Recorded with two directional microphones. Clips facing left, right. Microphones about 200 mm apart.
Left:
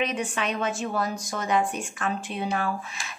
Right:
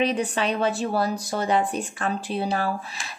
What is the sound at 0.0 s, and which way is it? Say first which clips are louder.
Speech: right 4 dB; 35° right (ahead or behind).